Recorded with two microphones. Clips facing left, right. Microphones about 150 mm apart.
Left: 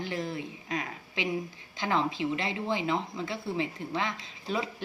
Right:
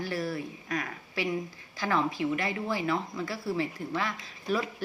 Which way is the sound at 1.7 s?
20° left (ahead or behind).